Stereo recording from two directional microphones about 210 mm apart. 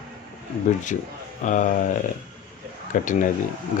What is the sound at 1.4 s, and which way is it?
Speech, 35° left (ahead or behind).